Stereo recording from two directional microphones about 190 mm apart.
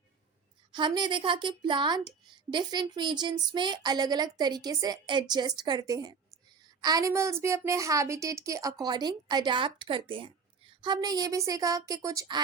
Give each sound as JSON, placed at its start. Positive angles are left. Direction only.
{"t": 0.7, "sound": "a woman's voice", "side_deg": -25}